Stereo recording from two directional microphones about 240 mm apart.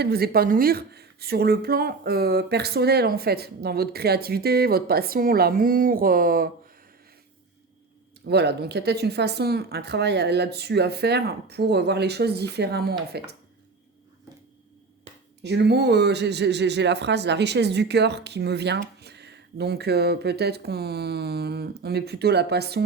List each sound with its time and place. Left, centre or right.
0.0 s speech: right
8.3 s speech: right
15.4 s speech: right